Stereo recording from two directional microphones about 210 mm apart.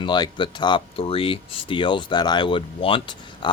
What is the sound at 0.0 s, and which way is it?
Speech, 20° left (ahead or behind).